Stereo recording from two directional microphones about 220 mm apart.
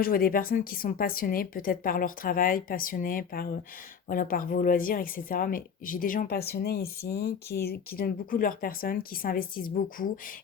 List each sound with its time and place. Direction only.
0.0 s a woman's voice: 40° left (ahead or behind)